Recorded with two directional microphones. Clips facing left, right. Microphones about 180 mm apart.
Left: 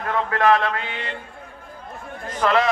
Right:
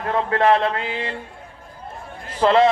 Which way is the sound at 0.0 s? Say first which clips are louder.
Right 2 dB; 25° right (ahead or behind).